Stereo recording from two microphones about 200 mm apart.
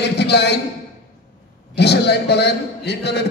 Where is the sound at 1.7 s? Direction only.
55° left (ahead or behind).